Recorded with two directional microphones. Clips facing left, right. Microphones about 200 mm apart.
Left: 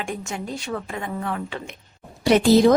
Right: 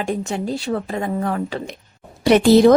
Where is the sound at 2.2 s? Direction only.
65° right (ahead or behind).